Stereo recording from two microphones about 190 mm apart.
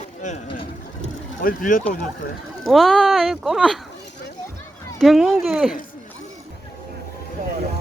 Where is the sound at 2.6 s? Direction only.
Centre (ahead or behind).